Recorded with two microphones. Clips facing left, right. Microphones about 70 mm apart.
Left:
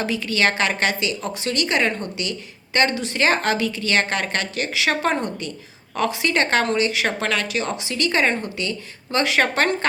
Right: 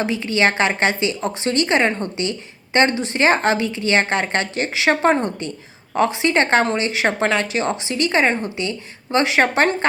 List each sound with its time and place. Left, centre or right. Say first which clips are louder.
0.0 s speech: right 3 dB; right